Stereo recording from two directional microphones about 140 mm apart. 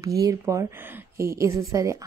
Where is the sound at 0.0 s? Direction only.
25° right (ahead or behind).